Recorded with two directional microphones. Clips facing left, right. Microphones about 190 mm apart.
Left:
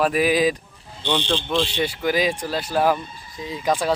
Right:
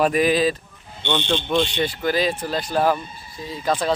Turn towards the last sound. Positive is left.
turn(degrees=10)  # may be behind; listen again after turning